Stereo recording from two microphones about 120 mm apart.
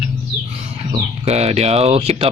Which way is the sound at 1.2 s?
65° right (ahead or behind).